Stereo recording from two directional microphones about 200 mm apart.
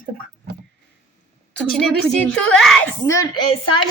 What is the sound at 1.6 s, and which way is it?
A woman's voice, centre (ahead or behind).